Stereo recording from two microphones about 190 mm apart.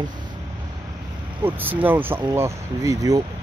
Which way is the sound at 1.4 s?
10° right (ahead or behind).